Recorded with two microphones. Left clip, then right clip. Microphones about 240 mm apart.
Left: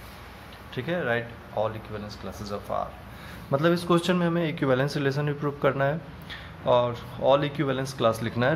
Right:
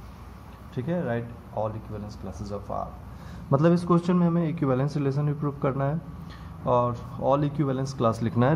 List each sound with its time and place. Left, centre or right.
0.7 s speech: centre